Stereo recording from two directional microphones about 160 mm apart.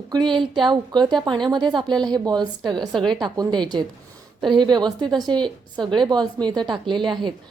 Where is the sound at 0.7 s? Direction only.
25° right (ahead or behind).